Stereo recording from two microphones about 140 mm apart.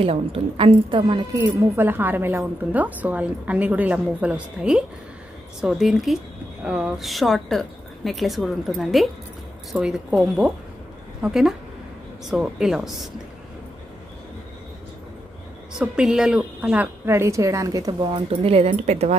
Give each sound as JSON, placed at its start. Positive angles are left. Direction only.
{"t": 0.0, "sound": "a woman's voice", "side_deg": -40}
{"t": 1.3, "sound": "a woman's voice", "side_deg": -15}
{"t": 11.2, "sound": "a woman's voice", "side_deg": 0}
{"t": 15.8, "sound": "a woman's voice", "side_deg": -5}
{"t": 18.3, "sound": "speech", "side_deg": -45}